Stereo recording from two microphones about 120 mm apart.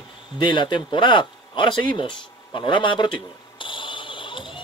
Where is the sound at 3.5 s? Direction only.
45° left (ahead or behind).